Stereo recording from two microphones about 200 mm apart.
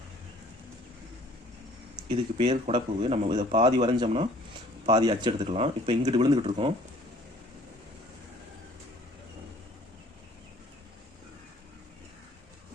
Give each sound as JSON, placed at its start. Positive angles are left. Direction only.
{"t": 2.0, "sound": "speech", "side_deg": -30}